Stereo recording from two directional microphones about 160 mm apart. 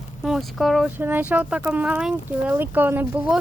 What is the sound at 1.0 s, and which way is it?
Speech, 10° right (ahead or behind).